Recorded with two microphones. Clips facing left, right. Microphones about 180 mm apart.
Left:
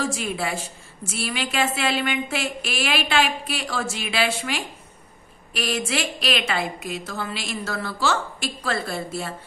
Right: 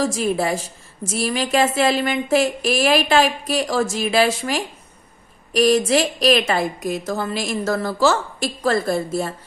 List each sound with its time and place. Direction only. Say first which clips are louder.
0.0 s a woman's voice: right 6 dB; 35° right (ahead or behind)